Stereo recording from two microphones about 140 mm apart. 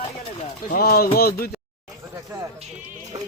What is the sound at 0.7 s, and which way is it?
Speech, 90° left.